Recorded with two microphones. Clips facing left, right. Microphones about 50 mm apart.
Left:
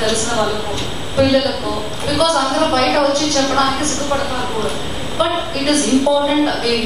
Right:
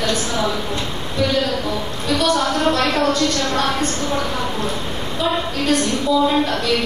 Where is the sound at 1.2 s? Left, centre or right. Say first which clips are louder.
Left 5 dB; left.